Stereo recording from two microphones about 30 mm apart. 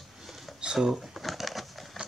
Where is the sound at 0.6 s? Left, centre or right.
Right.